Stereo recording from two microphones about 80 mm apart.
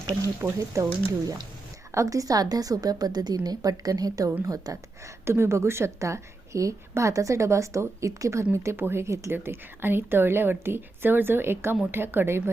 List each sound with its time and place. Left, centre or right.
0.4 s a woman's voice: right
1.9 s a woman's voice: right
5.2 s a woman's voice: right